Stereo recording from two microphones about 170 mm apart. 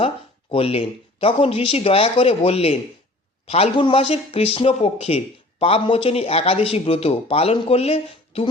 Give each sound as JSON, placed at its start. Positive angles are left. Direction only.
{"t": 0.5, "sound": "a man's voice", "side_deg": 35}